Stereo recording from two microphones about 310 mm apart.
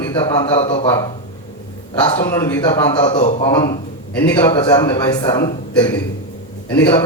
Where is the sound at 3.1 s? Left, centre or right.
Centre.